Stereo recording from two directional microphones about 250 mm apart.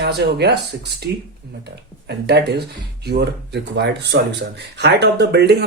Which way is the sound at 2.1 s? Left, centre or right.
Right.